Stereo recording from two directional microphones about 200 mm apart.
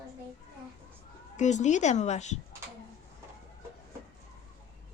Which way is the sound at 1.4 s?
35° left (ahead or behind).